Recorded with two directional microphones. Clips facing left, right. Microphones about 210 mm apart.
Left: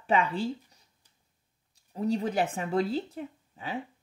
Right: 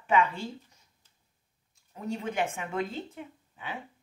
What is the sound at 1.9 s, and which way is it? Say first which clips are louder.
Speech: left 6 dB; 35° left (ahead or behind).